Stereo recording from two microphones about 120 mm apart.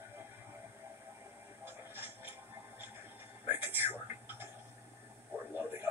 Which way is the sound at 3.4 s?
15° right (ahead or behind).